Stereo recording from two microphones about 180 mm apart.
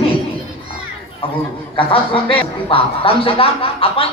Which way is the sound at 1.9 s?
30° left (ahead or behind).